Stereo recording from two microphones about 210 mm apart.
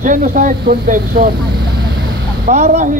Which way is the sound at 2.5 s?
35° right (ahead or behind).